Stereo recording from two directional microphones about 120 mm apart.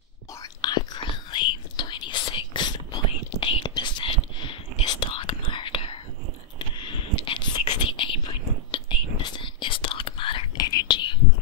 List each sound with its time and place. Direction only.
0.4 s whispering: 35° left (ahead or behind)
10.7 s whispering: 35° left (ahead or behind)